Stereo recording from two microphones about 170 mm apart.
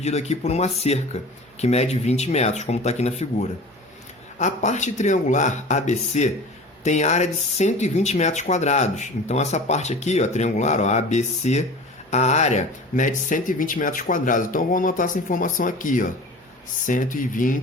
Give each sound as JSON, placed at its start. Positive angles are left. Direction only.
{"t": 0.0, "sound": "speech", "side_deg": 40}